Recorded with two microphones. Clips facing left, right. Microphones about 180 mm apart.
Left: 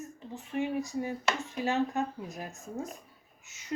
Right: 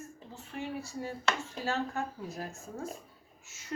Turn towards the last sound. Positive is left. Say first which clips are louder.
# left 2 dB
turn(degrees=20)  # may be behind; listen again after turning